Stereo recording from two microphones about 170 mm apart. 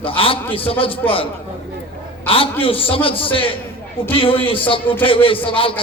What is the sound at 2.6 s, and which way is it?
A man's voice, 30° left (ahead or behind).